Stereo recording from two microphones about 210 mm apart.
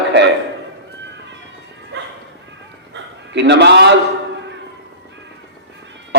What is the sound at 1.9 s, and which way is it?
Bow-wow, 55° right (ahead or behind).